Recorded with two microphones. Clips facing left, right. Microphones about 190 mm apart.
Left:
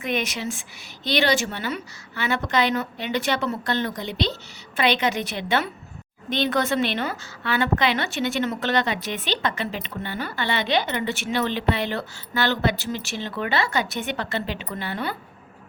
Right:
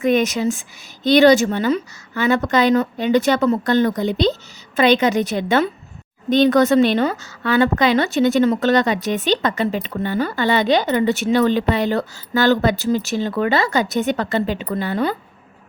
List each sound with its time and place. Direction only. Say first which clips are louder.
0.0 s a woman's voice: right 10 dB; 40° right (ahead or behind)